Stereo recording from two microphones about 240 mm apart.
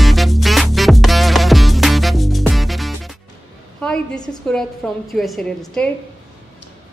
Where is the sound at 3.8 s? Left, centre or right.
Centre.